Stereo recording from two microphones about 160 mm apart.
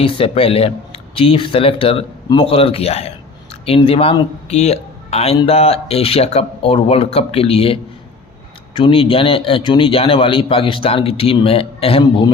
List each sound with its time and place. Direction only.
0.0 s speech: 35° left (ahead or behind)